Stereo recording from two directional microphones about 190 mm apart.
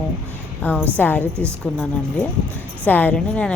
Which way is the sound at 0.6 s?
10° left (ahead or behind).